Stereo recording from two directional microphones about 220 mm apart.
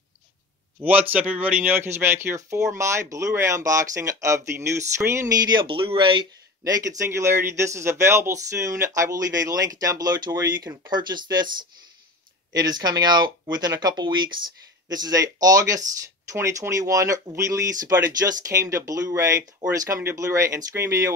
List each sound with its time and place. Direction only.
0.7 s speech: 10° right (ahead or behind)
12.5 s speech: 20° right (ahead or behind)